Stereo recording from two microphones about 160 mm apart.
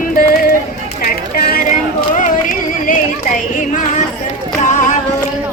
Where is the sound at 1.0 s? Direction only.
65° left (ahead or behind).